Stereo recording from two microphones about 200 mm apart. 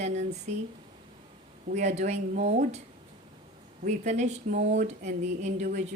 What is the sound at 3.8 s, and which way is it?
A woman's voice, 35° right (ahead or behind).